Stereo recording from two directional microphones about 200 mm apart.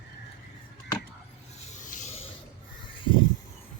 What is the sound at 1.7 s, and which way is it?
Rub, 40° left (ahead or behind).